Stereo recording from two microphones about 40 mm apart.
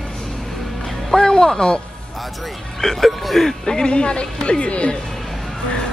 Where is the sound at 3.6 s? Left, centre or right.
Centre.